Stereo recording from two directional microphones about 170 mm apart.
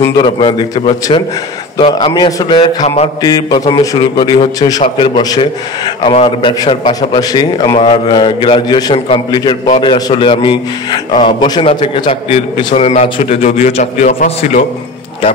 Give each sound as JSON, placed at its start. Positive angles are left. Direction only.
{"t": 0.2, "sound": "a man's voice", "side_deg": 30}